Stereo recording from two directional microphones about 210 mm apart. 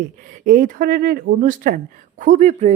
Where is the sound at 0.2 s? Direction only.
40° right (ahead or behind).